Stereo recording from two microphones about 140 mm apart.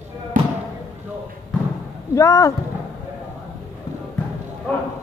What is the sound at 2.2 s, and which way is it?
Speech, 20° left (ahead or behind).